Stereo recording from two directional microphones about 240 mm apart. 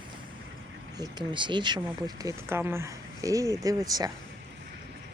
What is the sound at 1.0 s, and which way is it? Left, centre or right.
Speech, centre.